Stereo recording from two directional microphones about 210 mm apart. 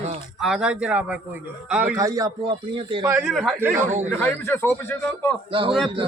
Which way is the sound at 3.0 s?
5° right (ahead or behind).